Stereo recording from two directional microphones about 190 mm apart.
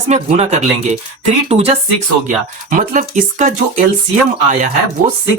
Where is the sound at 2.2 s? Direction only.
45° right (ahead or behind).